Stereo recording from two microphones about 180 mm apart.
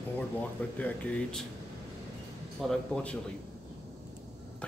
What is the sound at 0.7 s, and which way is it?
Speech, 5° left (ahead or behind).